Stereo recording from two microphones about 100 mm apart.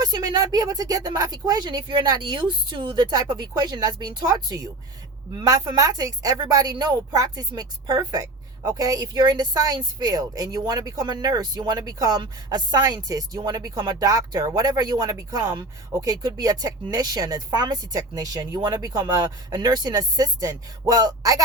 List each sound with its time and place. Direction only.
0.0 s speech: 40° right (ahead or behind)